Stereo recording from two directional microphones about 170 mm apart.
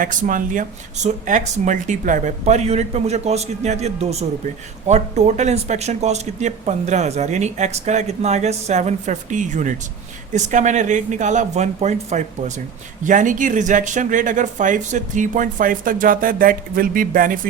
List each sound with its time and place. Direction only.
0.0 s speech: 50° right (ahead or behind)